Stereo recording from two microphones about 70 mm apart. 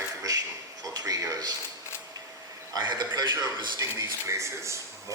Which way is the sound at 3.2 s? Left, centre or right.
Right.